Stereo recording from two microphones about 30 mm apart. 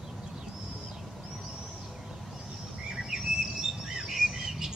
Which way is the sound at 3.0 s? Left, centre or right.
Centre.